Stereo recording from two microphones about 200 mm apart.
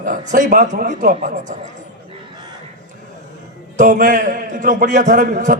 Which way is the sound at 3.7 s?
40° right (ahead or behind).